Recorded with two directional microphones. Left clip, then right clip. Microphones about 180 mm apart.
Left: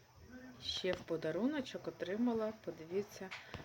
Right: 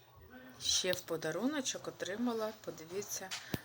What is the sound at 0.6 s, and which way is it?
Speech, centre (ahead or behind).